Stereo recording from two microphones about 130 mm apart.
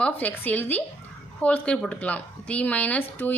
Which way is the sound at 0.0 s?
15° left (ahead or behind).